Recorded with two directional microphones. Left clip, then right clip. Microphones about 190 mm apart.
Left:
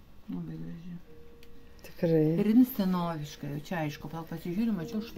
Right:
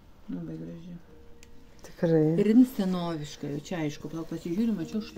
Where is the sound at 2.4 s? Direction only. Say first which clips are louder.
Right 3 dB; 40° left (ahead or behind).